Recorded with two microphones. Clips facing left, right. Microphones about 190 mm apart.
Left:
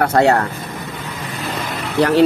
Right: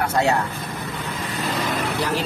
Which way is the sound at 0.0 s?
60° left (ahead or behind).